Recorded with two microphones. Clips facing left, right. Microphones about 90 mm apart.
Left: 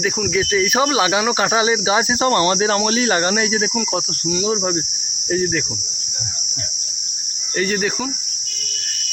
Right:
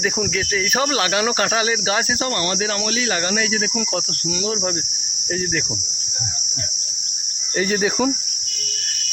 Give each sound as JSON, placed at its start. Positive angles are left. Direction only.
{"t": 0.3, "sound": "speech", "side_deg": 10}
{"t": 1.5, "sound": "cricket", "side_deg": 20}
{"t": 2.2, "sound": "cricket", "side_deg": 30}
{"t": 3.9, "sound": "speech", "side_deg": 10}
{"t": 5.3, "sound": "cricket", "side_deg": 0}
{"t": 7.5, "sound": "cricket", "side_deg": -10}